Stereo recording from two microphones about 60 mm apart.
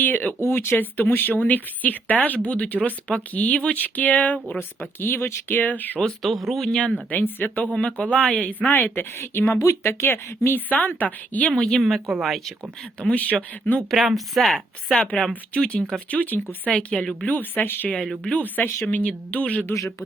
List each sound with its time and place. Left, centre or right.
0.0 s a woman's voice: left
0.4 s speech: left
0.8 s a woman's voice: left
6.0 s speech: centre
6.7 s speech: centre
7.1 s a woman's voice: left
11.5 s speech: centre
11.8 s speech: centre
13.0 s speech: left
13.9 s speech: centre
15.5 s speech: centre
16.7 s speech: centre; by 17.8 s left
17.9 s speech: centre
18.3 s a woman's voice: left